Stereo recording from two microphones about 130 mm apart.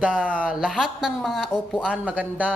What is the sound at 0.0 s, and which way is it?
A man's voice, 10° right (ahead or behind).